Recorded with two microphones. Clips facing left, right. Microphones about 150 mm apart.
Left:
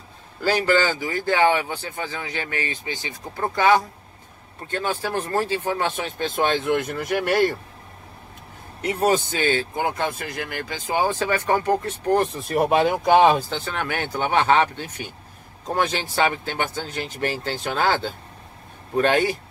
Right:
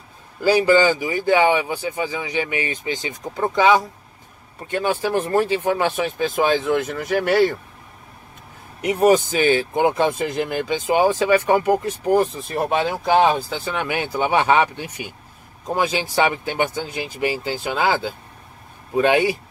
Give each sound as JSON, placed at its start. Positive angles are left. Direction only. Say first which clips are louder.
{"t": 0.4, "sound": "speech", "louder": "right 5 dB", "side_deg": -15}
{"t": 8.8, "sound": "speech", "louder": "right 5 dB", "side_deg": -15}